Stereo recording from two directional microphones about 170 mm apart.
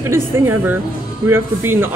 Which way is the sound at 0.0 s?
15° right (ahead or behind).